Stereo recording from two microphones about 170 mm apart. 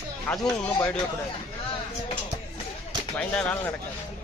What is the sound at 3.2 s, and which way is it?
Speech, 5° left (ahead or behind).